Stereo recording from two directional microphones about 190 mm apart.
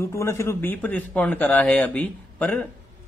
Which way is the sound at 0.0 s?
15° left (ahead or behind).